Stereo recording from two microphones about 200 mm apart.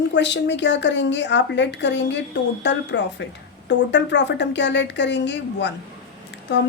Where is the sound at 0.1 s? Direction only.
60° left (ahead or behind).